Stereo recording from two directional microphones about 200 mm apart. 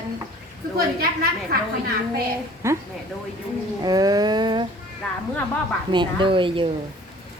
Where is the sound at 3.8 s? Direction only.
20° right (ahead or behind).